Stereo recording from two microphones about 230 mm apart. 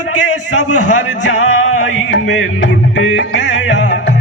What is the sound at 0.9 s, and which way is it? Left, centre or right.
Music, left.